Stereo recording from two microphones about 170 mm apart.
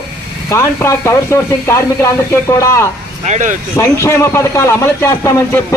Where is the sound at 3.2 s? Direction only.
45° right (ahead or behind).